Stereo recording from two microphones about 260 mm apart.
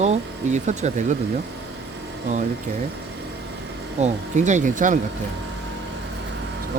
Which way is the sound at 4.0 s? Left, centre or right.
Right.